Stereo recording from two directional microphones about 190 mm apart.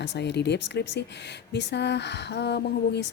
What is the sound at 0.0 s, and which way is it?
A woman's voice, 65° left (ahead or behind).